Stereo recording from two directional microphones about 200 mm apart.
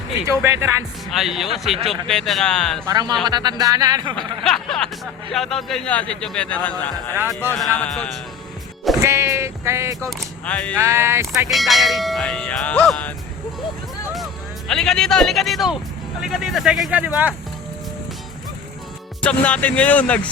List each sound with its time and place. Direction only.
0.3 s speech: 15° right (ahead or behind)
1.1 s speech: centre (ahead or behind)
2.9 s speech: 20° right (ahead or behind)
4.4 s speech: centre (ahead or behind)
9.0 s a sound: 15° right (ahead or behind)
10.1 s speech: 5° left (ahead or behind)
10.8 s speech: 15° right (ahead or behind)
11.5 s speech: centre (ahead or behind)
14.7 s speech: centre (ahead or behind)
19.2 s speech: 5° left (ahead or behind)